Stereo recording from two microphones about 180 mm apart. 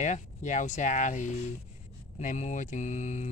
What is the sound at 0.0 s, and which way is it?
Speech, 40° left (ahead or behind).